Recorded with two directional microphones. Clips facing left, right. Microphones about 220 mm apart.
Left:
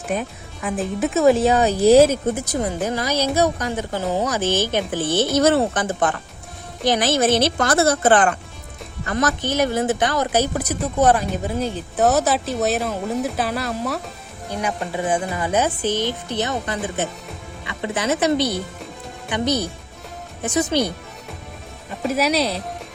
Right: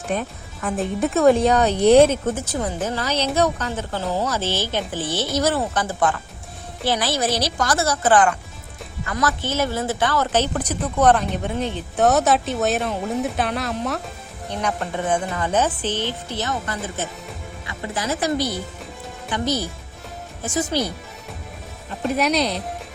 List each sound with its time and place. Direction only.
0.1 s speech: centre (ahead or behind); by 5.4 s 20° left (ahead or behind)
6.8 s speech: 20° left (ahead or behind)
7.4 s a woman's voice: 55° left (ahead or behind)
9.0 s speech: 35° left (ahead or behind)
9.4 s speech: 15° left (ahead or behind)
22.0 s speech: 5° left (ahead or behind)